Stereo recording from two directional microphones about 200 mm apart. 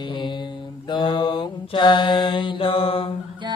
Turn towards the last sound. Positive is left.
turn(degrees=25)  # may be behind; listen again after turning